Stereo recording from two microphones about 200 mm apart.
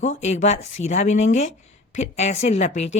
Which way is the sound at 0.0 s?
35° left (ahead or behind).